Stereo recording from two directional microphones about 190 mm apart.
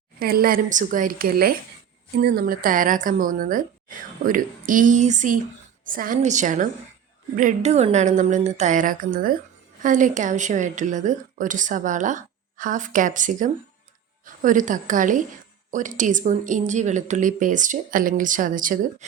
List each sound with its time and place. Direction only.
0.2 s a woman's voice: 50° right (ahead or behind)